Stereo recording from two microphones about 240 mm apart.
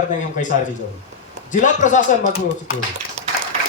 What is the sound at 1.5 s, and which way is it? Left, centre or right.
Speech, left.